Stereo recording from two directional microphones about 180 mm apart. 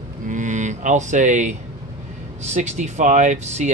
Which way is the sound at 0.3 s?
45° right (ahead or behind).